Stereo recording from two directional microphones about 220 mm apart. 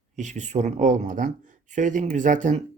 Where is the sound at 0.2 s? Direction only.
35° right (ahead or behind).